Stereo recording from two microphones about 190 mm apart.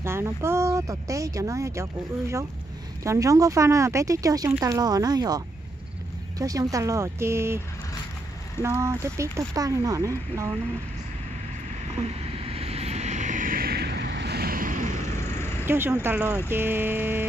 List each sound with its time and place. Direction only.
0.0 s speech: 15° right (ahead or behind)
8.6 s speech: 15° right (ahead or behind)
11.9 s vehicle: 30° right (ahead or behind)
15.6 s speech: 10° right (ahead or behind)